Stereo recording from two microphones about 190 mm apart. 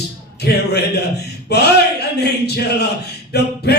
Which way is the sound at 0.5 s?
55° left (ahead or behind).